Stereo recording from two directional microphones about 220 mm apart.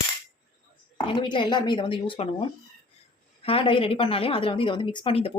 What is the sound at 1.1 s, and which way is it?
A woman's voice, 20° left (ahead or behind).